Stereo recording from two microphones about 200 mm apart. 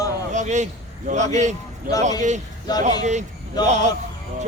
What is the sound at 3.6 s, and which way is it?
Speech, 35° right (ahead or behind).